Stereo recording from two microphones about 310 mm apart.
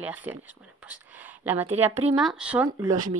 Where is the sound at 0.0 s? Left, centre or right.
Centre.